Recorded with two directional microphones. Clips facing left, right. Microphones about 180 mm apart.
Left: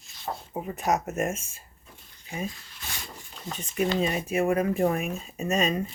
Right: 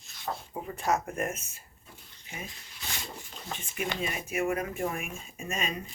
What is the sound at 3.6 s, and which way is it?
Speech, 35° left (ahead or behind).